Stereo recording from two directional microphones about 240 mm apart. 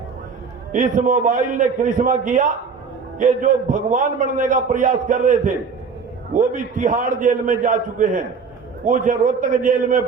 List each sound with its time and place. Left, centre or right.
0.7 s a man's voice: right